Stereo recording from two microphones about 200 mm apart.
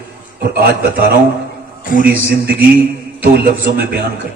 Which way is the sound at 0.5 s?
50° right (ahead or behind).